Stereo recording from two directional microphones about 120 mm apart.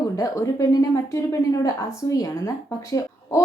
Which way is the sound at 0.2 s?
30° left (ahead or behind).